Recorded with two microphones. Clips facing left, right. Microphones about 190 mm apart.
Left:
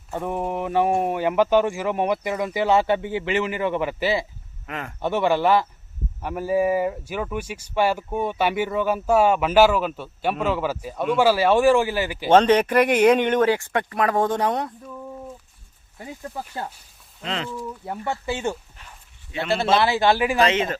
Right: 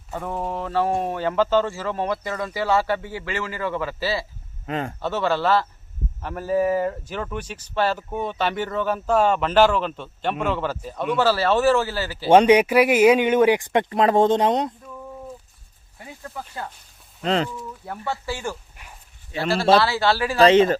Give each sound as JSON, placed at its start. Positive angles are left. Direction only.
{"t": 0.1, "sound": "speech", "side_deg": 15}
{"t": 4.6, "sound": "speech", "side_deg": -30}
{"t": 4.9, "sound": "speech", "side_deg": 15}
{"t": 12.3, "sound": "speech", "side_deg": -10}
{"t": 16.2, "sound": "speech", "side_deg": 30}
{"t": 17.2, "sound": "speech", "side_deg": -40}
{"t": 17.8, "sound": "speech", "side_deg": 20}
{"t": 18.8, "sound": "bow-wow", "side_deg": -10}
{"t": 19.3, "sound": "speech", "side_deg": -35}
{"t": 19.7, "sound": "speech", "side_deg": 20}
{"t": 20.4, "sound": "speech", "side_deg": -35}